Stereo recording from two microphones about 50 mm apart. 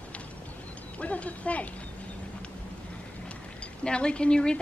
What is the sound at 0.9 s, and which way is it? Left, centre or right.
Speech, left.